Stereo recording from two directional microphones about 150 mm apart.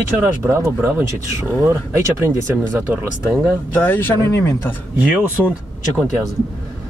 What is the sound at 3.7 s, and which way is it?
Speech, 10° left (ahead or behind).